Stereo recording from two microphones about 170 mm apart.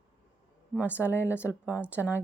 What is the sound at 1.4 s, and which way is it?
Speech, 5° right (ahead or behind).